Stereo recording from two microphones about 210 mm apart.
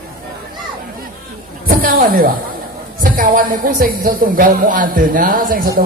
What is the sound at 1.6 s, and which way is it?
A woman's voice, 45° right (ahead or behind).